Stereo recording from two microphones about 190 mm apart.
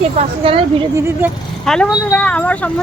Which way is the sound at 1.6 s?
5° left (ahead or behind).